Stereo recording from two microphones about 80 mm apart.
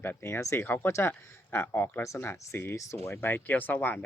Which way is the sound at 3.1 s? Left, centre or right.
Left.